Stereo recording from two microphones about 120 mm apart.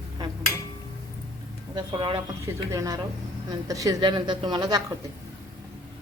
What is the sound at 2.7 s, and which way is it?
Speech, 30° right (ahead or behind).